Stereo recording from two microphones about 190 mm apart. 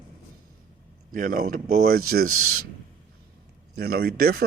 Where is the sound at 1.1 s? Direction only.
45° right (ahead or behind).